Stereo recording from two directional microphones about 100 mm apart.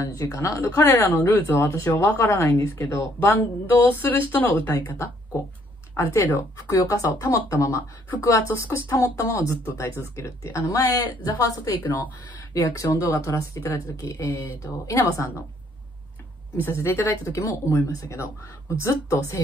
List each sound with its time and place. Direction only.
0.0 s speech: 30° left (ahead or behind)
16.8 s speech: 25° left (ahead or behind)